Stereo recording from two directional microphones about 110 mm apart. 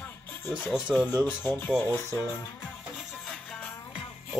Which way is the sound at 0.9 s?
5° left (ahead or behind).